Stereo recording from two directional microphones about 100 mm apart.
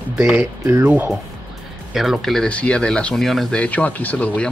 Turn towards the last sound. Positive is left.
turn(degrees=15)  # may be behind; listen again after turning